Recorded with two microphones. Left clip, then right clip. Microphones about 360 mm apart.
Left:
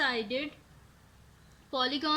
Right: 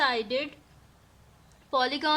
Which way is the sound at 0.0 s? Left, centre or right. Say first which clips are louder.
Right 4 dB; centre.